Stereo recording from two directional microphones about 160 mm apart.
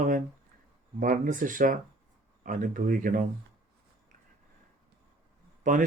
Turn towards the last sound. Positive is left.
turn(degrees=-55)  # may be behind; listen again after turning